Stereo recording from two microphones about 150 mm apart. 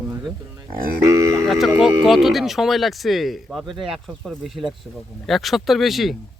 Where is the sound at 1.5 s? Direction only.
Centre (ahead or behind).